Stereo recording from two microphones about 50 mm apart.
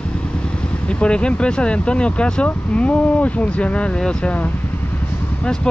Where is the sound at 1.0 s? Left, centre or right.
Left.